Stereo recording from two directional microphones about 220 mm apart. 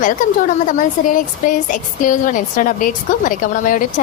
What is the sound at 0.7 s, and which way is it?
A woman's voice, 35° left (ahead or behind).